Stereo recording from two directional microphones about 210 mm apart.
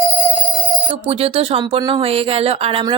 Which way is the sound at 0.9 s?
25° right (ahead or behind).